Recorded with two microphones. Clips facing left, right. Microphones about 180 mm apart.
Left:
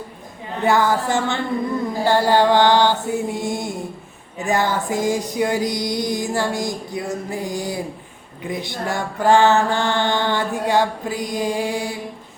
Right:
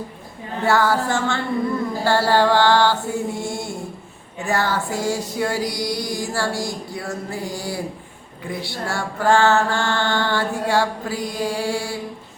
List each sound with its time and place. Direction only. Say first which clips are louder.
0.6 s a woman's voice: left 1 dB; 20° left (ahead or behind)
2.0 s mantra: left 1 dB; 20° left (ahead or behind)